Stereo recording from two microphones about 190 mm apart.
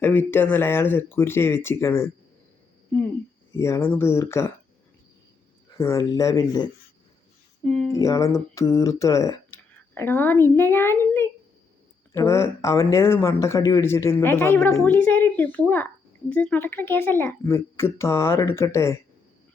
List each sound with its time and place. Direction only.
0.0 s speech: 10° left (ahead or behind)
3.5 s speech: 15° left (ahead or behind)
5.7 s speech: 15° left (ahead or behind)
7.6 s speech: 5° left (ahead or behind)
7.9 s speech: 15° left (ahead or behind)